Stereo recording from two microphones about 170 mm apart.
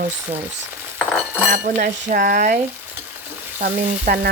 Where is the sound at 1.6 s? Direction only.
50° right (ahead or behind).